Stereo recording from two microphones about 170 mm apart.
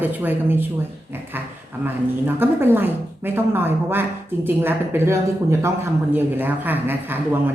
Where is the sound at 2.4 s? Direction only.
10° right (ahead or behind).